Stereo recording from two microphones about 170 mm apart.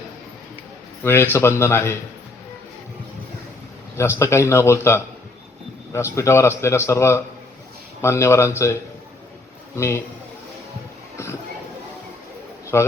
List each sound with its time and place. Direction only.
1.0 s a man's voice: 15° left (ahead or behind)
3.9 s a man's voice: 15° left (ahead or behind)
9.7 s a man's voice: 15° left (ahead or behind)
11.2 s a sound: 15° left (ahead or behind)
12.7 s a man's voice: 15° left (ahead or behind)